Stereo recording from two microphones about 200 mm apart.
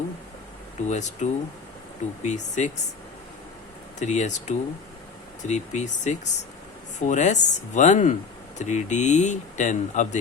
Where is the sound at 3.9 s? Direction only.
35° left (ahead or behind).